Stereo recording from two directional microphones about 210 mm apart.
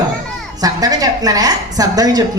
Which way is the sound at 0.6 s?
15° right (ahead or behind).